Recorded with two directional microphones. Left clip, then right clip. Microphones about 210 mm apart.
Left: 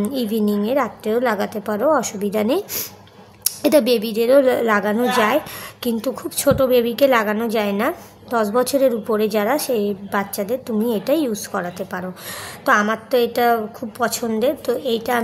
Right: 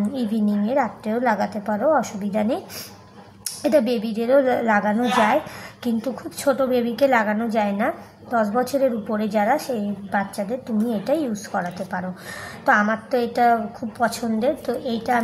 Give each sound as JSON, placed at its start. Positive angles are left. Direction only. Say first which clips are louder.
{"t": 0.1, "sound": "a woman's voice", "louder": "left 4 dB", "side_deg": 40}